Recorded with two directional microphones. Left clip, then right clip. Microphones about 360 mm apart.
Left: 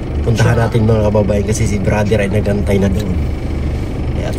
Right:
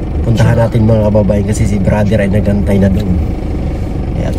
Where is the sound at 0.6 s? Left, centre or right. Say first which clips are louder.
Right 3 dB; centre.